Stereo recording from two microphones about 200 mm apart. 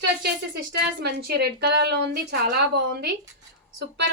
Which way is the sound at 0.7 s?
55° right (ahead or behind).